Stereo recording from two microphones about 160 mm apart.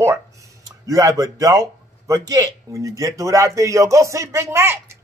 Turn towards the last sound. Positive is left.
turn(degrees=-15)  # may be behind; listen again after turning